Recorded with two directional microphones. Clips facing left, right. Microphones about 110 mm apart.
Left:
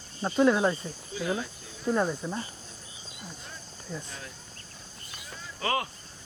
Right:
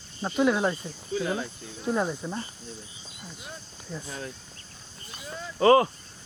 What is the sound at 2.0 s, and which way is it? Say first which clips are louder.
Speech: even; 5° right (ahead or behind).